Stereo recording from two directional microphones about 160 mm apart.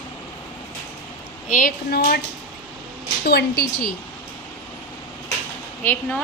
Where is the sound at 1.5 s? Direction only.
65° left (ahead or behind).